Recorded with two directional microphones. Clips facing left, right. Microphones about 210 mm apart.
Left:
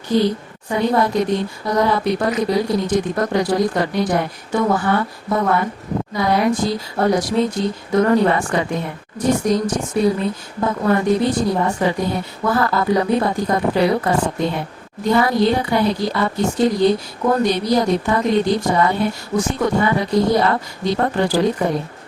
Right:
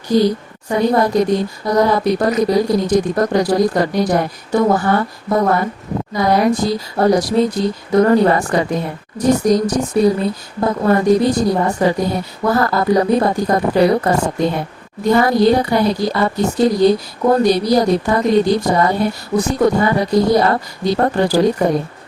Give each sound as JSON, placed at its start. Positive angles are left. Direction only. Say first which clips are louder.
{"t": 0.1, "sound": "speech", "louder": "right 3 dB", "side_deg": -40}